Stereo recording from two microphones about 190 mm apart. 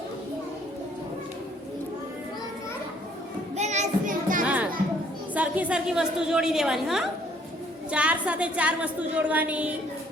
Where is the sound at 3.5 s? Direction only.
35° right (ahead or behind).